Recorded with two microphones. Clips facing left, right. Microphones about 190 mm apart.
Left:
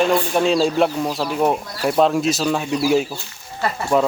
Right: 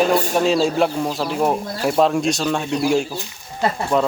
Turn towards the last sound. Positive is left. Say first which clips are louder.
# even
turn(degrees=0)  # may be behind; listen again after turning